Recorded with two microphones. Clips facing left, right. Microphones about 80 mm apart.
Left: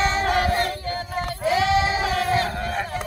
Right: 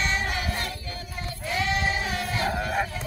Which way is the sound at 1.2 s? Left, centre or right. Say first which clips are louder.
Left 7 dB; left.